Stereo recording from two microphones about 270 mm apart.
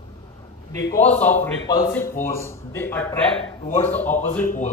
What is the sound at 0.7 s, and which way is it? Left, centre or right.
Speech, centre.